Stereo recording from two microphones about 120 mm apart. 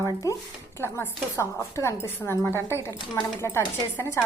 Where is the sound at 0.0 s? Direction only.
25° left (ahead or behind).